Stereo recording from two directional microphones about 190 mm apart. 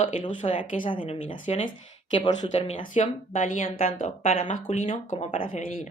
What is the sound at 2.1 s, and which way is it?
Speech, 25° left (ahead or behind).